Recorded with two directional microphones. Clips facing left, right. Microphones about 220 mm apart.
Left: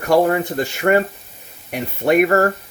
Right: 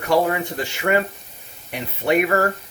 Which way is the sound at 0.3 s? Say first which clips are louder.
Left 5 dB; 45° left (ahead or behind).